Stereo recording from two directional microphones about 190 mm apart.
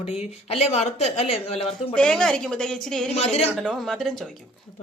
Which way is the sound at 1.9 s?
5° left (ahead or behind).